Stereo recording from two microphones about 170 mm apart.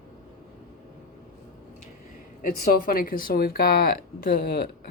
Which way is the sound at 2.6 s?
55° left (ahead or behind).